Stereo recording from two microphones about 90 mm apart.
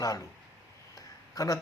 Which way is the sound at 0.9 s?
40° left (ahead or behind).